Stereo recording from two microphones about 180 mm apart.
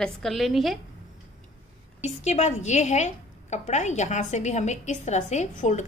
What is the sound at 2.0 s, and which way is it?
A woman's voice, 40° left (ahead or behind).